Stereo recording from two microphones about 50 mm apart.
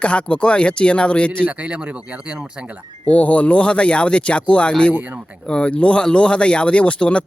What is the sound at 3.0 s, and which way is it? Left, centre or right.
Speech, left.